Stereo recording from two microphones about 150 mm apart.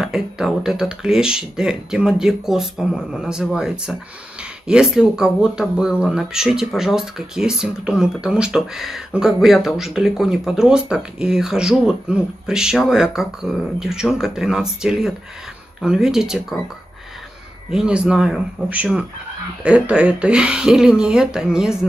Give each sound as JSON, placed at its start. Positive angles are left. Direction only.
{"t": 0.0, "sound": "speech", "side_deg": -5}
{"t": 17.6, "sound": "speech", "side_deg": -5}